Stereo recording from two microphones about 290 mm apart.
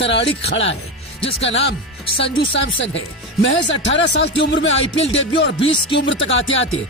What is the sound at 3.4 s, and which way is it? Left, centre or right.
Speech, left.